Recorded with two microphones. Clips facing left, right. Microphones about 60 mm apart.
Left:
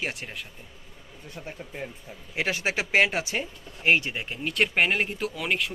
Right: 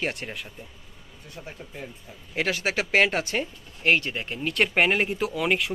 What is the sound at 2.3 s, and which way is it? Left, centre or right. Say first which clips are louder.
Speech: right 2 dB; centre.